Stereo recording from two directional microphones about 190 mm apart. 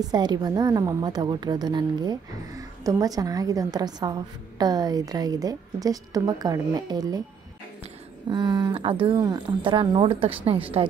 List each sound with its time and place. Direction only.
0.0 s a woman's voice: 20° right (ahead or behind)
8.3 s a woman's voice: 20° right (ahead or behind)